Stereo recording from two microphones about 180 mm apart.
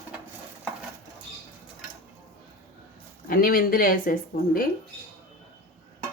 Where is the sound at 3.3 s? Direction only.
55° left (ahead or behind).